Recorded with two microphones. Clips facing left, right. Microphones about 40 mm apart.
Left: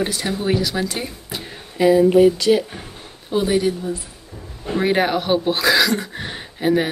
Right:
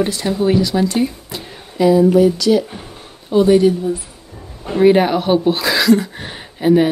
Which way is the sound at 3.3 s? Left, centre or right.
Centre.